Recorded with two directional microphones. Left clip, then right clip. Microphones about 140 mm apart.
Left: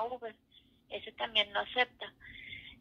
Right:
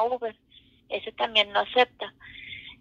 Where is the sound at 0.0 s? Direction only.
40° right (ahead or behind).